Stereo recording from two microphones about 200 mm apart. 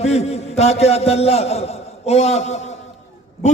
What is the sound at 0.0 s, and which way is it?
A man's voice, 30° left (ahead or behind).